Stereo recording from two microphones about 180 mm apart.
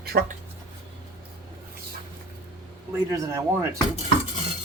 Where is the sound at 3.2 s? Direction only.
15° right (ahead or behind).